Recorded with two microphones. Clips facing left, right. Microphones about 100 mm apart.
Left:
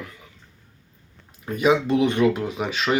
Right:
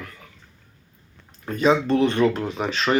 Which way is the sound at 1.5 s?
10° left (ahead or behind).